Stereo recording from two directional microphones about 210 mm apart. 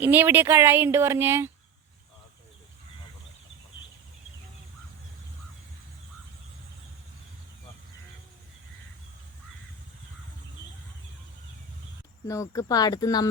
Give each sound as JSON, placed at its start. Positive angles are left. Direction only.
{"t": 0.0, "sound": "speech", "side_deg": -10}
{"t": 12.3, "sound": "speech", "side_deg": 15}